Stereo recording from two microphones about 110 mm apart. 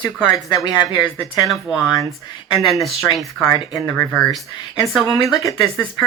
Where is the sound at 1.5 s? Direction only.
Centre (ahead or behind).